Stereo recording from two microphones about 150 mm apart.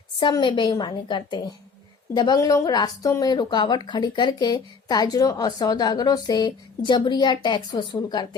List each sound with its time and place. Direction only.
0.2 s a woman's voice: 30° left (ahead or behind)